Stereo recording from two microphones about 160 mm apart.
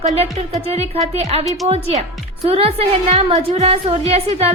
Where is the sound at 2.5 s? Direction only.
40° right (ahead or behind).